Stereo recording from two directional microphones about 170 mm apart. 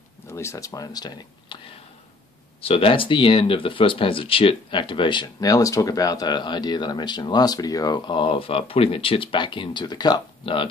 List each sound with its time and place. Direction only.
0.3 s speech: 15° left (ahead or behind)